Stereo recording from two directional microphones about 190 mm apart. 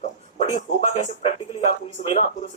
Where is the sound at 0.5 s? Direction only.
35° left (ahead or behind).